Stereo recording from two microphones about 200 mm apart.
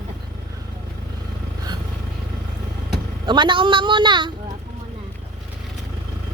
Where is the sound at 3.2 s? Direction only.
25° right (ahead or behind).